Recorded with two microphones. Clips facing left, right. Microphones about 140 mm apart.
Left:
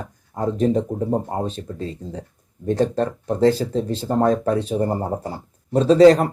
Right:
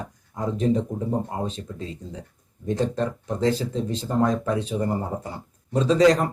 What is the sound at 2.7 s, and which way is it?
Speech, 35° left (ahead or behind).